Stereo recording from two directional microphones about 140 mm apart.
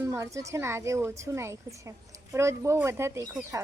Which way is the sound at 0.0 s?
20° right (ahead or behind).